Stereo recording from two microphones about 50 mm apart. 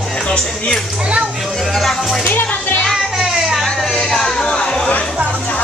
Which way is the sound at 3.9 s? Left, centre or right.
Centre.